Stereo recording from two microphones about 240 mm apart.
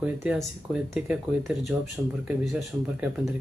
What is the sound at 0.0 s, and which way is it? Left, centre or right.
Speech, centre.